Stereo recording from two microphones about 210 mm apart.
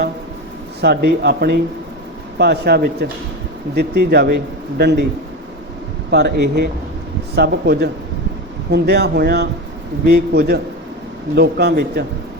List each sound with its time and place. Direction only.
0.8 s speech: 55° right (ahead or behind)
6.1 s speech: 55° right (ahead or behind)